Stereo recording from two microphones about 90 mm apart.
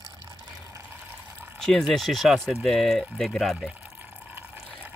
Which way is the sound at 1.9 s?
Centre (ahead or behind).